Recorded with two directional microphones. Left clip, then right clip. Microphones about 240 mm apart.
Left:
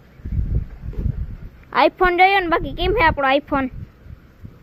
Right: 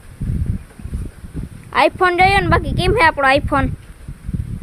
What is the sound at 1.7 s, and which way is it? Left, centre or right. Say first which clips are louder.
Speech: right 1 dB; centre.